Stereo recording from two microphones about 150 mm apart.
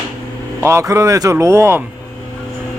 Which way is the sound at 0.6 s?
20° right (ahead or behind).